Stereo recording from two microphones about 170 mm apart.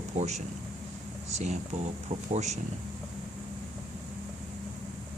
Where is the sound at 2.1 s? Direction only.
40° right (ahead or behind).